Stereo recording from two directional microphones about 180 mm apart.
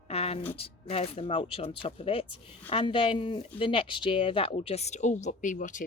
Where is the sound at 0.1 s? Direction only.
35° left (ahead or behind).